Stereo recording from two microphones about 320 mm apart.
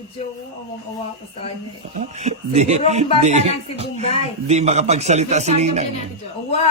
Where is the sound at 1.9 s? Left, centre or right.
Right.